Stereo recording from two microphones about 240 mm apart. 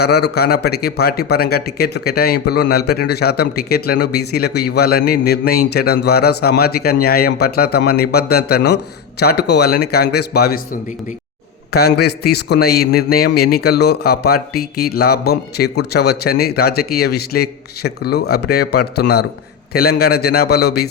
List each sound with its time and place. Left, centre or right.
0.0 s a man's voice: left
11.7 s a man's voice: left